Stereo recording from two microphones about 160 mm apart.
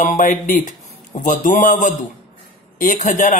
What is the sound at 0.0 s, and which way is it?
A man's voice, 55° left (ahead or behind).